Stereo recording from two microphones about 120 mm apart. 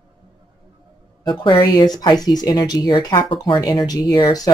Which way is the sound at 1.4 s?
40° left (ahead or behind).